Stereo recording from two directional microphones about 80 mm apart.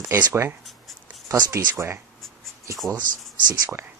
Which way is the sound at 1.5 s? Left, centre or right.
Right.